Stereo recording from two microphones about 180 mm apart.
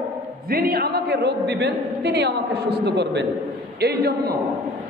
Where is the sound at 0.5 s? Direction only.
55° right (ahead or behind); by 3.3 s 75° right (ahead or behind).